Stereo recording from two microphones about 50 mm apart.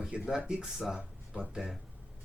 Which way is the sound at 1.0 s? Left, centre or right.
Right.